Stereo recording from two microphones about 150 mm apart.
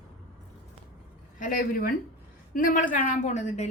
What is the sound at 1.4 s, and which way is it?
A woman's voice, 65° left (ahead or behind).